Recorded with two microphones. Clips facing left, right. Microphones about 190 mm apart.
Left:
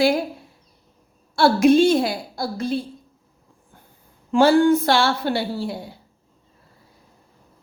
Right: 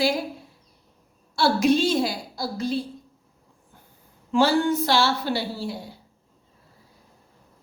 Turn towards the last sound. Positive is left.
turn(degrees=55)  # may be behind; listen again after turning